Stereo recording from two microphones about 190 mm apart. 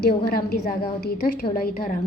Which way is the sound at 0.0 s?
55° left (ahead or behind).